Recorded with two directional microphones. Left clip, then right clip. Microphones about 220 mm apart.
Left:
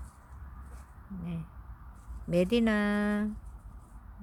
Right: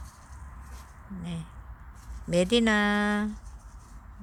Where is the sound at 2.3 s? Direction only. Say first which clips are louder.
Right 4 dB; centre (ahead or behind).